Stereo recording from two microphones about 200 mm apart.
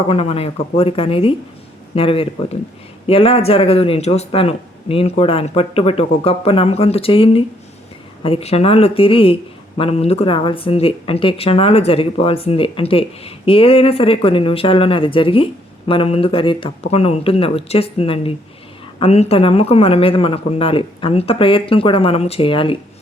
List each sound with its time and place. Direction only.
0.1 s speech: 30° left (ahead or behind)